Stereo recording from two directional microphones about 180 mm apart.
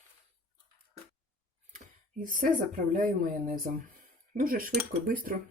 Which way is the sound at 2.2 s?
50° right (ahead or behind).